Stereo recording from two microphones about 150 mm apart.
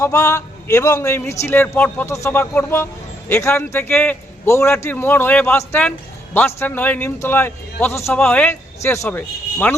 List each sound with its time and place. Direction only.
0.0 s a man's voice: 20° left (ahead or behind)